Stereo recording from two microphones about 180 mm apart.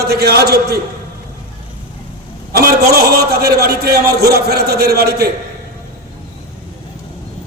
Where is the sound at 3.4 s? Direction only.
60° right (ahead or behind).